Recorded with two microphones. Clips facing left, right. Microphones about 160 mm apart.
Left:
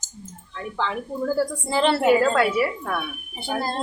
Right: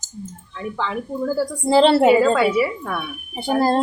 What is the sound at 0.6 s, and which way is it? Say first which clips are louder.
Speech: right 2 dB; centre (ahead or behind).